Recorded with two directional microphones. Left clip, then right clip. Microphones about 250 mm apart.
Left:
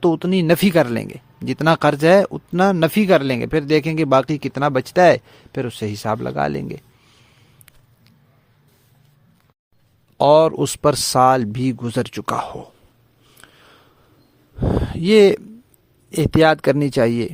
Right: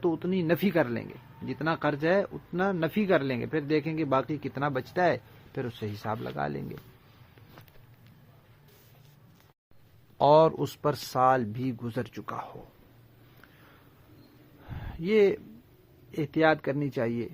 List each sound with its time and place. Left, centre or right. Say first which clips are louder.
0.0 s speech: left 11 dB; left
10.2 s speech: left 8 dB; left
13.4 s a sound: left 10 dB; left
14.8 s speech: left 11 dB; left